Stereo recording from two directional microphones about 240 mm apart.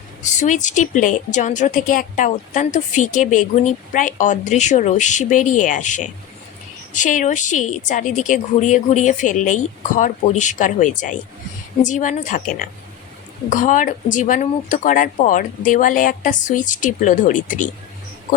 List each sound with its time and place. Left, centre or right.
0.2 s a woman's voice: left